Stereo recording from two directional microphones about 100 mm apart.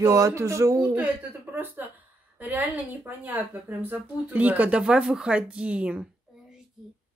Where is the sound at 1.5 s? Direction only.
20° right (ahead or behind).